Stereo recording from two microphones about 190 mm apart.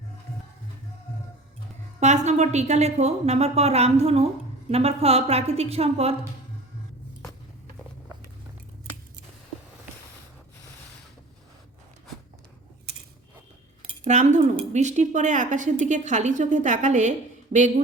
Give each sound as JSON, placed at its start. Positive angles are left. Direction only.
{"t": 2.0, "sound": "a woman's voice", "side_deg": -35}
{"t": 14.0, "sound": "a woman's voice", "side_deg": -40}